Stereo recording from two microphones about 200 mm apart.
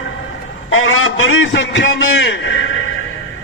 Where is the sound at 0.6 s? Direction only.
90° left; by 2.7 s 70° left (ahead or behind).